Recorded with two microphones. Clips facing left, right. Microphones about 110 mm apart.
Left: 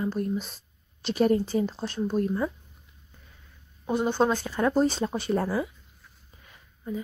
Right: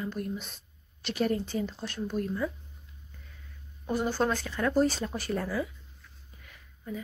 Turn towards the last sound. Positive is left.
turn(degrees=25)  # may be behind; listen again after turning